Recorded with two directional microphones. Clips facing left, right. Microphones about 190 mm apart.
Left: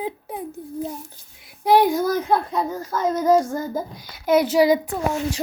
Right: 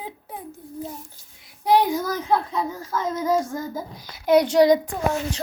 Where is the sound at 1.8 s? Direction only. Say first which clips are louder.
Left 5 dB; 10° left (ahead or behind).